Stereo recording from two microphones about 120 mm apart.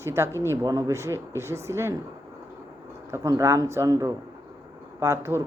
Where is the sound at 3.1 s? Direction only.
25° right (ahead or behind).